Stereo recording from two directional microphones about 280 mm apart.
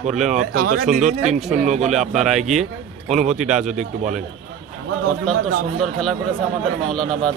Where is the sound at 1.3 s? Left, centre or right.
Right.